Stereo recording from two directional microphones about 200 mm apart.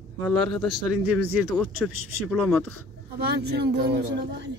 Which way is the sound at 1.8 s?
Centre (ahead or behind).